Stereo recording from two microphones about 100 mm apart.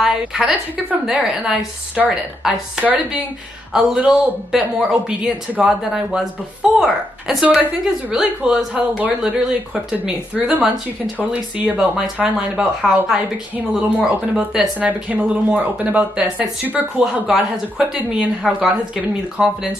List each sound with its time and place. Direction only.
0.0 s a woman's voice: 5° right (ahead or behind)
17.0 s a woman's voice: centre (ahead or behind)